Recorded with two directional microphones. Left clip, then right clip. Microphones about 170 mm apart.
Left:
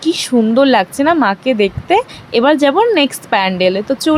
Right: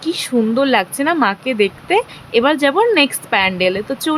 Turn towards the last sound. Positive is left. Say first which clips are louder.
# left 4 dB
turn(degrees=10)  # may be behind; listen again after turning